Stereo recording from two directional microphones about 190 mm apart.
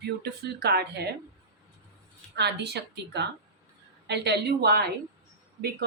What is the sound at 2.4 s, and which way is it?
A woman's voice, 60° right (ahead or behind).